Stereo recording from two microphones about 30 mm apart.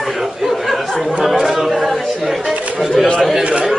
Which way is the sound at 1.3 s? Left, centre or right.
Centre.